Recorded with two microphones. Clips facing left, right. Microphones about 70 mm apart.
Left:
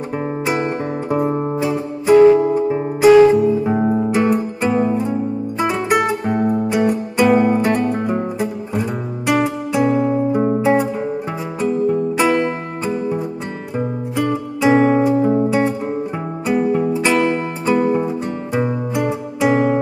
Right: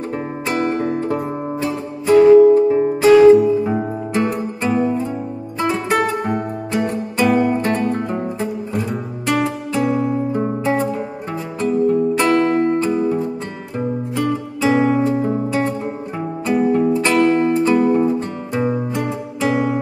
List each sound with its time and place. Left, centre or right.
0.1 s guitar: centre
1.3 s music: centre